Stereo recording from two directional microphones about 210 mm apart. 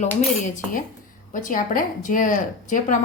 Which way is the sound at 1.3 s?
40° left (ahead or behind).